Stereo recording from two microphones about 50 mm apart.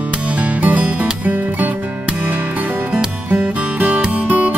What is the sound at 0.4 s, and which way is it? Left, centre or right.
Music, right.